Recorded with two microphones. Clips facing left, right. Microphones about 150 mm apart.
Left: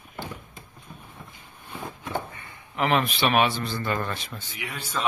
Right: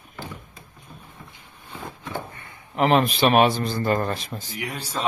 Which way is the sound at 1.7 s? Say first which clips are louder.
Left 1 dB; 15° left (ahead or behind).